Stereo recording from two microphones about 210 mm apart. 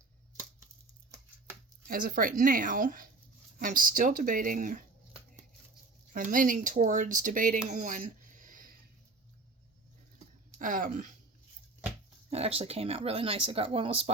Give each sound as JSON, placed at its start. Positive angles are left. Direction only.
{"t": 1.9, "sound": "speech", "side_deg": -45}
{"t": 7.7, "sound": "a sound", "side_deg": -35}
{"t": 10.6, "sound": "speech", "side_deg": -40}
{"t": 11.9, "sound": "speech", "side_deg": -30}